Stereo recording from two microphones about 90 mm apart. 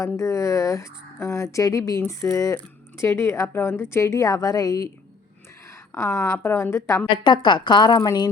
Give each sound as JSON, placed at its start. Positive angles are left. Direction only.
{"t": 0.0, "sound": "speech", "side_deg": 35}
{"t": 5.9, "sound": "a woman's voice", "side_deg": 25}
{"t": 7.3, "sound": "a woman's voice", "side_deg": 60}